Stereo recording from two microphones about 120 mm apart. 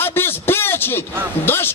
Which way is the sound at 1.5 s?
20° left (ahead or behind).